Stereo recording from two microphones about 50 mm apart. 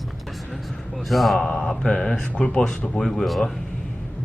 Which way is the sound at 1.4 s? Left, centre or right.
Centre.